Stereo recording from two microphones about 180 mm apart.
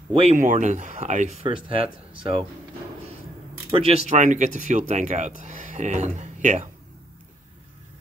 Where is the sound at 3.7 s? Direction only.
30° right (ahead or behind).